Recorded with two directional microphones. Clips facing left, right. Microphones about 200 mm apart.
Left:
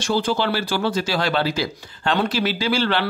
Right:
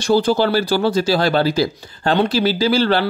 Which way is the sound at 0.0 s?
40° right (ahead or behind).